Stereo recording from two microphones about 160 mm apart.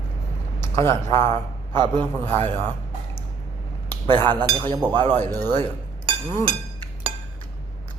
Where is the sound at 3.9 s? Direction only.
15° left (ahead or behind).